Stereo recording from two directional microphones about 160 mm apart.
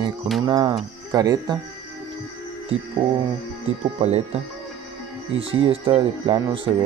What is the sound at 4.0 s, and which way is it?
Speech, 40° right (ahead or behind).